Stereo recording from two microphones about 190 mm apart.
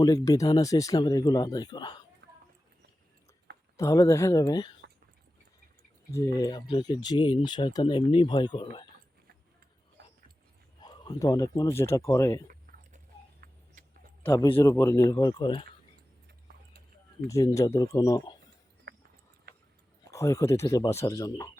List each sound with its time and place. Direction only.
0.0 s speech: 20° left (ahead or behind)
2.2 s a sound: 65° right (ahead or behind)
3.8 s speech: 15° left (ahead or behind)
6.1 s speech: 15° left (ahead or behind)
10.8 s speech: 20° left (ahead or behind)
12.7 s biting: 45° right (ahead or behind)
14.2 s a sound: 10° left (ahead or behind)
14.6 s speech: 15° left (ahead or behind)
17.2 s speech: 15° left (ahead or behind)
20.1 s speech: 15° left (ahead or behind)